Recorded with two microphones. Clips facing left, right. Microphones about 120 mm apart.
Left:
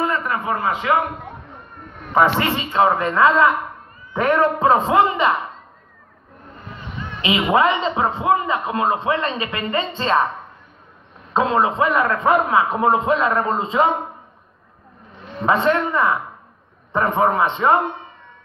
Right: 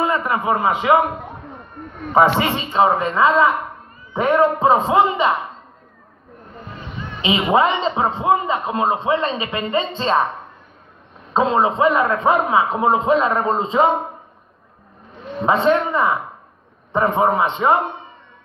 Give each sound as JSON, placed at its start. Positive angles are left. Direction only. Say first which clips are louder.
{"t": 0.0, "sound": "a man's voice", "louder": "right 2 dB", "side_deg": -15}
{"t": 2.1, "sound": "a man's voice", "louder": "right 2 dB", "side_deg": -15}
{"t": 7.2, "sound": "a man's voice", "louder": "right 1 dB", "side_deg": -25}
{"t": 11.3, "sound": "a man's voice", "louder": "right 1 dB", "side_deg": -25}
{"t": 15.4, "sound": "a man's voice", "louder": "right 1 dB", "side_deg": -25}